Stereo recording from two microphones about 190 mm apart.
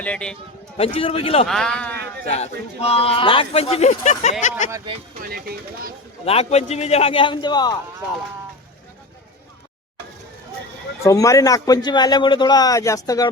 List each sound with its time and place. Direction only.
0.0 s speech: 5° left (ahead or behind)
0.8 s a man's voice: 30° left (ahead or behind)
1.5 s speech: 5° left (ahead or behind)
2.2 s speech: 35° left (ahead or behind)
5.2 s speech: 50° right (ahead or behind)
6.2 s speech: 35° left (ahead or behind)
11.0 s a man's voice: 15° left (ahead or behind)